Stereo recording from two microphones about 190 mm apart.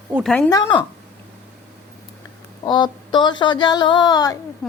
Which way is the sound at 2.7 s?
25° left (ahead or behind).